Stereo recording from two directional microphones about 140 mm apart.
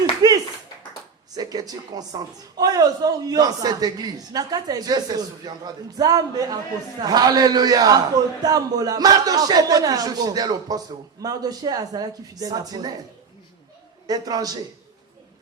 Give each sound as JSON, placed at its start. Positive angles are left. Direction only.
{"t": 0.2, "sound": "clapping", "side_deg": -25}
{"t": 1.4, "sound": "a man's voice", "side_deg": -25}
{"t": 14.1, "sound": "a man's voice", "side_deg": -25}